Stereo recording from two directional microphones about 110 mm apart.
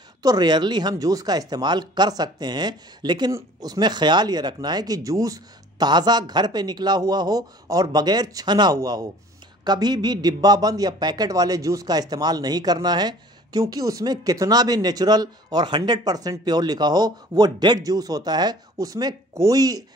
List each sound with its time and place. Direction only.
0.2 s a man's voice: 40° right (ahead or behind)